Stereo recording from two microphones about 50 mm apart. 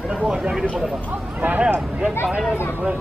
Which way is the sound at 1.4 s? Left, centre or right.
Right.